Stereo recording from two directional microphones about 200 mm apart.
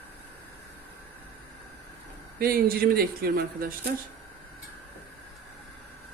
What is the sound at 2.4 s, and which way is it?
Speech, 50° right (ahead or behind).